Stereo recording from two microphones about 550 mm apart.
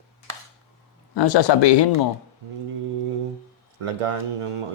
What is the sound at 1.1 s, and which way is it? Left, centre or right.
Speech, left.